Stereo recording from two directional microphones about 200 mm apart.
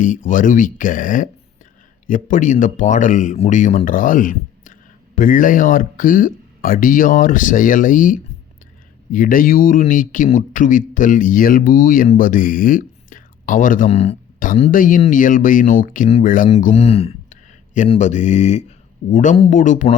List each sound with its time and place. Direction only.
0.3 s speech: 40° left (ahead or behind)